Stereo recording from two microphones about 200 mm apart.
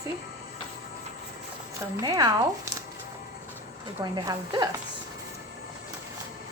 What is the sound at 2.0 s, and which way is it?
Speech, 20° right (ahead or behind).